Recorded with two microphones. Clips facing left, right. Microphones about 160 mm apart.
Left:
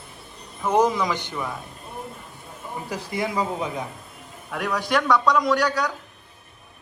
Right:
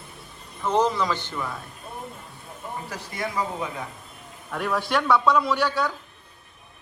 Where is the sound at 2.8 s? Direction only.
15° left (ahead or behind).